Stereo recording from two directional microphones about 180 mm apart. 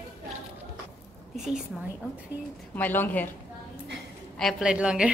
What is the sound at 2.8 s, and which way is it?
Speech, 10° left (ahead or behind).